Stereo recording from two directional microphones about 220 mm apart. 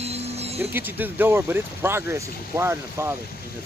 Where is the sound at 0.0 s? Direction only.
30° right (ahead or behind).